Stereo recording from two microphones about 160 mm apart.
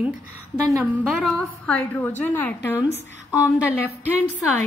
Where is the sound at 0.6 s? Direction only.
15° right (ahead or behind).